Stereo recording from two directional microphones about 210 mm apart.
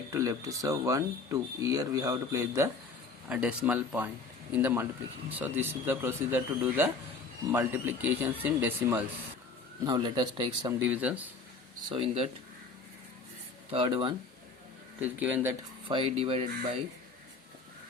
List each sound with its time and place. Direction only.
0.1 s speech: 15° right (ahead or behind)
9.8 s speech: 20° right (ahead or behind)
10.8 s speech: 5° right (ahead or behind)
11.9 s speech: 30° right (ahead or behind)
13.7 s speech: 25° right (ahead or behind)
15.0 s speech: 10° right (ahead or behind)
15.9 s speech: 25° right (ahead or behind)